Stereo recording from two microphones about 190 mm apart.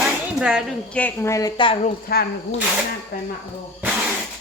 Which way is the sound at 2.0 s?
55° left (ahead or behind).